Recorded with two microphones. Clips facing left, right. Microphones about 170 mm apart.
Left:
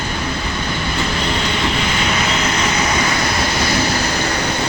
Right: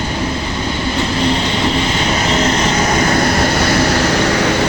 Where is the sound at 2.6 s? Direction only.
45° right (ahead or behind); by 4.5 s 70° right (ahead or behind).